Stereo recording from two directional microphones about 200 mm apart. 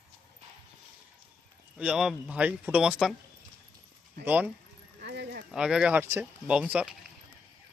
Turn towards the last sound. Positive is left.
turn(degrees=-5)  # may be behind; listen again after turning